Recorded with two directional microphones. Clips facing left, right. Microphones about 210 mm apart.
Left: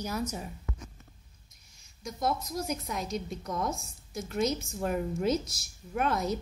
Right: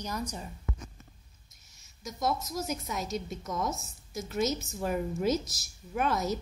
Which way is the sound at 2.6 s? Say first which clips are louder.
Even; centre (ahead or behind).